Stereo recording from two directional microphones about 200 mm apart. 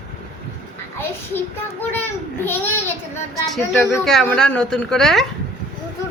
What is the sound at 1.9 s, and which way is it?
Speech, 10° left (ahead or behind).